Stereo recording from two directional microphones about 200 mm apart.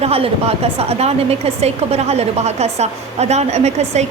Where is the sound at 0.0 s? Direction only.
30° right (ahead or behind).